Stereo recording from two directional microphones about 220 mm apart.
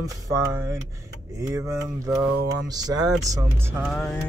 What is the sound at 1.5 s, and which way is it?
Speech, 15° right (ahead or behind).